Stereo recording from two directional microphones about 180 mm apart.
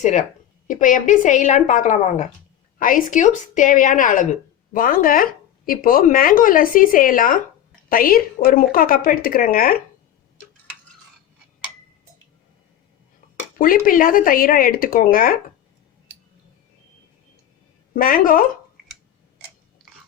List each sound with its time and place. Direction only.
0.0 s a woman's voice: 40° left (ahead or behind)
13.6 s a woman's voice: 50° left (ahead or behind)
17.9 s a woman's voice: 50° left (ahead or behind)
19.8 s biting: 5° left (ahead or behind)